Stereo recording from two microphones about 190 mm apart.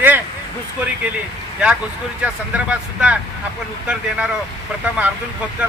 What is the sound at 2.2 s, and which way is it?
Speech, 5° right (ahead or behind).